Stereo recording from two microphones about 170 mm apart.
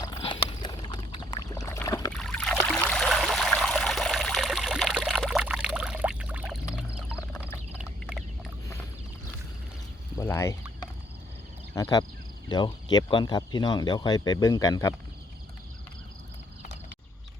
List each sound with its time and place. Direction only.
0.0 s rowboat: 25° left (ahead or behind)
2.1 s a sound: centre (ahead or behind)
2.9 s stream: centre (ahead or behind)
10.2 s fowl: 15° left (ahead or behind)
11.7 s cricket: 20° left (ahead or behind)
12.5 s speech: 25° left (ahead or behind)